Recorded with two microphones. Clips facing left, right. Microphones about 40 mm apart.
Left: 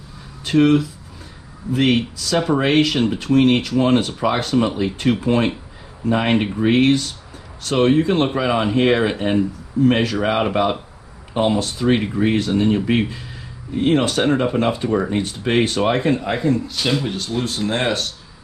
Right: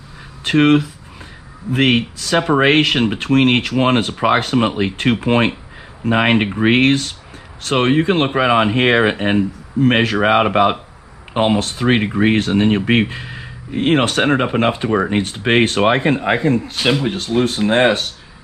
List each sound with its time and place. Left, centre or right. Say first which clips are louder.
0.4 s speech: right 2 dB; right